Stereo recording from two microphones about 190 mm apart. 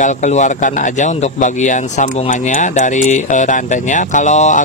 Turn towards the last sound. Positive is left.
turn(degrees=40)  # may be behind; listen again after turning